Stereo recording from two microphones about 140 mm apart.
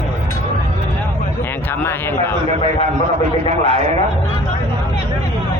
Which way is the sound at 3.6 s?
50° right (ahead or behind).